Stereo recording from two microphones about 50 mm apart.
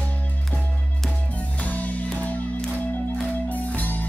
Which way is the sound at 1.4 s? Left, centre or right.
Left.